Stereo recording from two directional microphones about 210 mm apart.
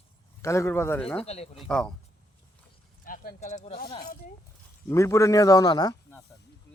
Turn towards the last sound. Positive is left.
turn(degrees=20)  # may be behind; listen again after turning